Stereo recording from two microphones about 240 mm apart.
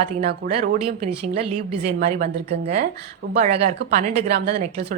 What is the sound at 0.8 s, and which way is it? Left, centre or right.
A woman's voice, right.